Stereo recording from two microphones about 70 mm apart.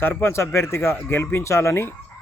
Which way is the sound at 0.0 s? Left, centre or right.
Left.